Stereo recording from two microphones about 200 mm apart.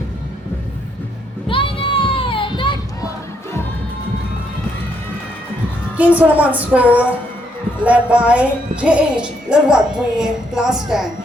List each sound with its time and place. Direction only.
1.5 s children playing: 25° left (ahead or behind)
6.0 s a woman's voice: 5° right (ahead or behind)